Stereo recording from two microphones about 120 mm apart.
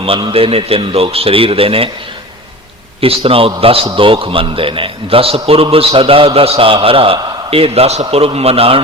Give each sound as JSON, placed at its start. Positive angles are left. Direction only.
{"t": 0.0, "sound": "a man's voice", "side_deg": -50}
{"t": 3.0, "sound": "a man's voice", "side_deg": -50}